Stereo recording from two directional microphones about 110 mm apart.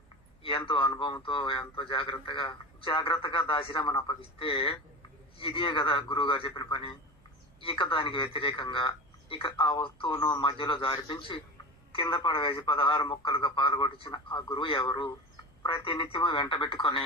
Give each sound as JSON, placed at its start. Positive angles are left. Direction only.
{"t": 0.4, "sound": "a man's voice", "side_deg": 50}